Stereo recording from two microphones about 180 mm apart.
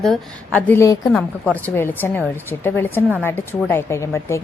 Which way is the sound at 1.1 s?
5° left (ahead or behind).